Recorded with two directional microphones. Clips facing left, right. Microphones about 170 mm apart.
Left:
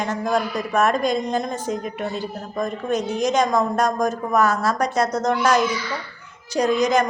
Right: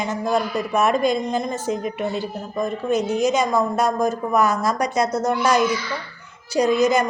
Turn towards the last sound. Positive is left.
turn(degrees=-10)  # may be behind; listen again after turning